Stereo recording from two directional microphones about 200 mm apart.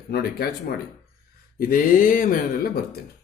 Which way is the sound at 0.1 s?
50° left (ahead or behind).